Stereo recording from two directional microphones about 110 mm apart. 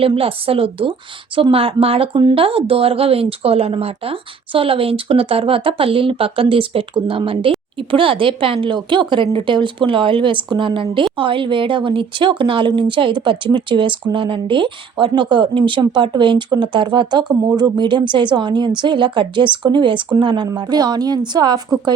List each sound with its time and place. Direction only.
0.0 s a woman's voice: 55° right (ahead or behind); by 21.6 s 40° right (ahead or behind)